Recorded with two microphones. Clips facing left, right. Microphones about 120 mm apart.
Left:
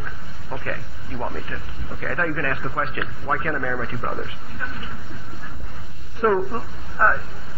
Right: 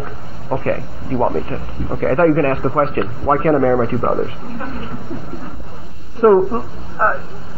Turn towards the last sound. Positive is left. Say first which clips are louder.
# right 3 dB
turn(degrees=-30)  # may be behind; listen again after turning